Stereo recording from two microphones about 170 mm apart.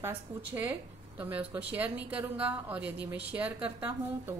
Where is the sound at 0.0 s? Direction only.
10° right (ahead or behind).